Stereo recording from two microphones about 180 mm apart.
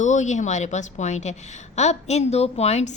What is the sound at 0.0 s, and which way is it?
A woman's voice, 40° left (ahead or behind).